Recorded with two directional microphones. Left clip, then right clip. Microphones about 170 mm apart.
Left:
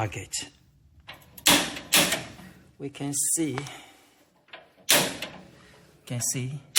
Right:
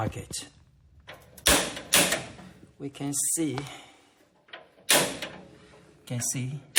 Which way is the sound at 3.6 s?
10° right (ahead or behind).